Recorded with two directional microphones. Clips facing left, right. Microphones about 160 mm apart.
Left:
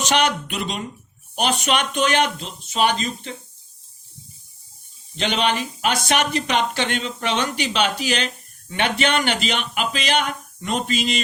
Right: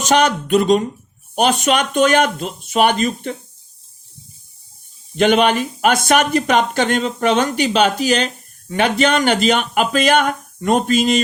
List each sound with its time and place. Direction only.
0.0 s speech: 45° right (ahead or behind)
5.1 s speech: 50° right (ahead or behind)